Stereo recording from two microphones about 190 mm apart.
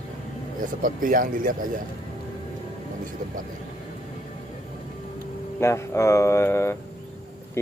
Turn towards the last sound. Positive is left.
turn(degrees=15)  # may be behind; listen again after turning